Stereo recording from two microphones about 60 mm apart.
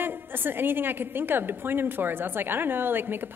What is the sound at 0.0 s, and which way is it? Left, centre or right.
A woman's voice, right.